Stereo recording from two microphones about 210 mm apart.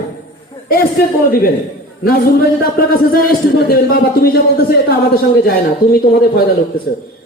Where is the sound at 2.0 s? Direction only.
45° left (ahead or behind).